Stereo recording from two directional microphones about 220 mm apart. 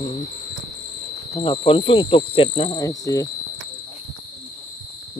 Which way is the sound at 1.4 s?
25° left (ahead or behind).